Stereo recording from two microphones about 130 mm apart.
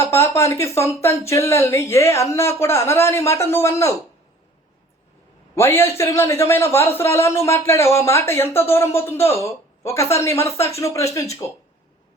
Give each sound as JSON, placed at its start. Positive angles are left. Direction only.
{"t": 0.0, "sound": "a man's voice", "side_deg": 20}
{"t": 5.5, "sound": "a man's voice", "side_deg": 20}